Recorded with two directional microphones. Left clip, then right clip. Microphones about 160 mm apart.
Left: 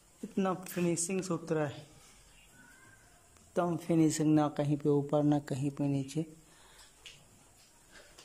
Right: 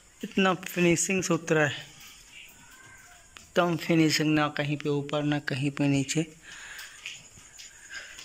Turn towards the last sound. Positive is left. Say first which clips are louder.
# right 8 dB
turn(degrees=10)  # may be behind; listen again after turning